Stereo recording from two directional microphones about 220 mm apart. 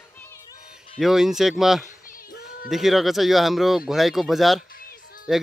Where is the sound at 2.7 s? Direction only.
Centre (ahead or behind).